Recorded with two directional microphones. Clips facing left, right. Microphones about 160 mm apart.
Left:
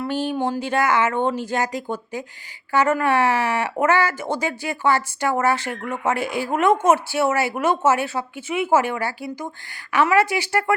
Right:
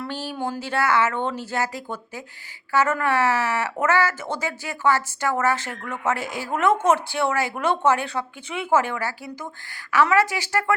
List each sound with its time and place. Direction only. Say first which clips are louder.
0.1 s speech: left 8 dB; 15° left (ahead or behind)